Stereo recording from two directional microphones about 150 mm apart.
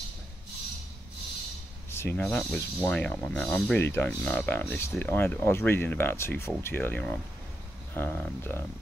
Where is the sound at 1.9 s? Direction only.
15° left (ahead or behind).